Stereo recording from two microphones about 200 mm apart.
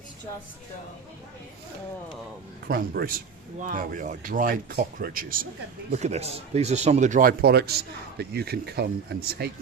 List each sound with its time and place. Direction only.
2.6 s speech: 50° right (ahead or behind)
5.9 s speech: 35° right (ahead or behind); by 9.5 s 55° right (ahead or behind)